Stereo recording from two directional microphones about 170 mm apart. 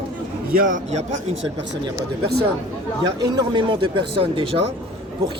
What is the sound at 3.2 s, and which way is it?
Speech, 25° right (ahead or behind).